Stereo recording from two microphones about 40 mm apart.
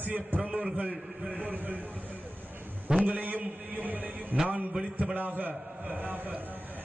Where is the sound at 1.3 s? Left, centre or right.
Right.